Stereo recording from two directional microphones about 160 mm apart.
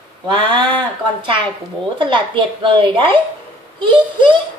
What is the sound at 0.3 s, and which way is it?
Speech, 30° right (ahead or behind).